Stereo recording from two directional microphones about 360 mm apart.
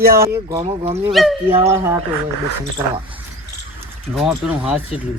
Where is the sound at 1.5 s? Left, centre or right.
Centre.